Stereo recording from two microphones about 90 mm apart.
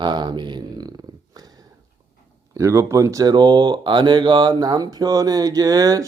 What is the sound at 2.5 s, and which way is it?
Speech, 35° right (ahead or behind).